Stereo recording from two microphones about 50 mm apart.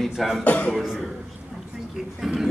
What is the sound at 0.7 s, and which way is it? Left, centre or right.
Speech, centre.